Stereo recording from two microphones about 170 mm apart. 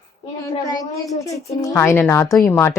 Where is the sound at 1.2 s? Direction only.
20° left (ahead or behind).